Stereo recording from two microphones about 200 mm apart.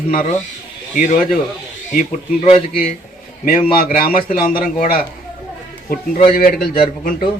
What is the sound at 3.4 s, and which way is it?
A man's voice, 45° left (ahead or behind).